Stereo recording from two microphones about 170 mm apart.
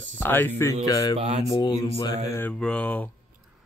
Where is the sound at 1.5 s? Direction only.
25° left (ahead or behind).